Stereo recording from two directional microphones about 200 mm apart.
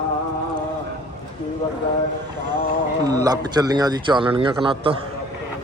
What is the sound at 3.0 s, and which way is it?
Speech, 20° right (ahead or behind).